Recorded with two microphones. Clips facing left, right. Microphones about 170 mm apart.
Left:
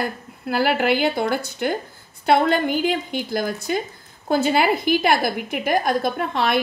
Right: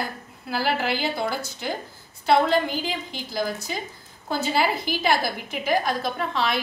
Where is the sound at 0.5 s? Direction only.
60° left (ahead or behind).